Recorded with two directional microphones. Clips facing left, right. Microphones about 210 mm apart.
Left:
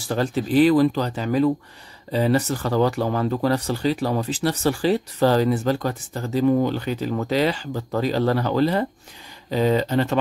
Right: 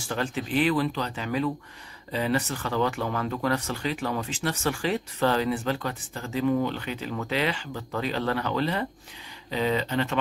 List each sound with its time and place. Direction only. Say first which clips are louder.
0.0 s speech: left 6 dB; 35° left (ahead or behind)